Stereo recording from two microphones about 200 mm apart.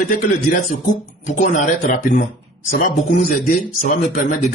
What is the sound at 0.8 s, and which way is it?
A man's voice, 40° left (ahead or behind).